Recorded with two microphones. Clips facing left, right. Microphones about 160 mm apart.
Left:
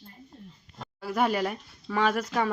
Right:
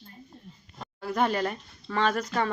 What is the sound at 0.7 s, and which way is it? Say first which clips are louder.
Speech: even; centre (ahead or behind).